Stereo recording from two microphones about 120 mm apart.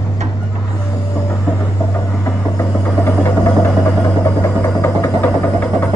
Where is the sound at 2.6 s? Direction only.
20° left (ahead or behind).